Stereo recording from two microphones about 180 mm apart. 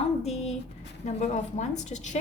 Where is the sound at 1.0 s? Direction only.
40° left (ahead or behind).